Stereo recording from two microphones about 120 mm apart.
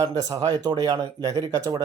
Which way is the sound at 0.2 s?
35° right (ahead or behind).